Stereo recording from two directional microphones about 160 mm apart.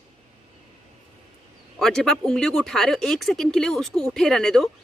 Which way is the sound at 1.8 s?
5° left (ahead or behind).